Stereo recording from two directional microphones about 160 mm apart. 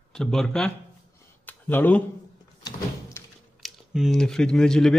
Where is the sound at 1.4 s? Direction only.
10° left (ahead or behind).